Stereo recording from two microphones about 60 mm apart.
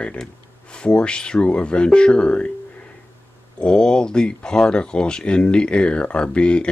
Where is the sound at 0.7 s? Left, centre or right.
Centre.